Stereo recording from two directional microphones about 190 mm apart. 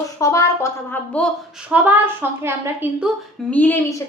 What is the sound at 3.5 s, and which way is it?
Speech, 10° left (ahead or behind).